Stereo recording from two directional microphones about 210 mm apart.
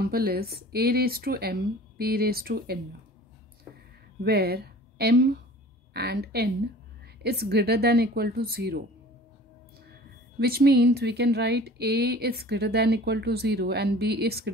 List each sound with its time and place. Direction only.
0.0 s speech: 45° right (ahead or behind)
4.2 s a woman's voice: 45° right (ahead or behind)
10.4 s speech: 50° right (ahead or behind)